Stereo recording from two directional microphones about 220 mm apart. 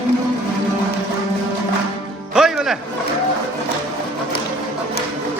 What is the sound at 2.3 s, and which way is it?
Music, 5° right (ahead or behind).